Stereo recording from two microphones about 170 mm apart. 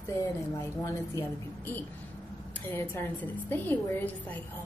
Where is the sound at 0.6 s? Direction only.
15° left (ahead or behind).